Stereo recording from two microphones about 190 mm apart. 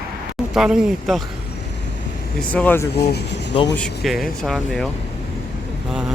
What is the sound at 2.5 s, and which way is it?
Speech, 10° left (ahead or behind).